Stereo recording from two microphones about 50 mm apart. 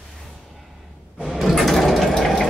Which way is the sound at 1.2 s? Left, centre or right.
Centre.